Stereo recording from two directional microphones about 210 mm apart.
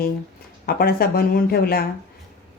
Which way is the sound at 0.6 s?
45° left (ahead or behind).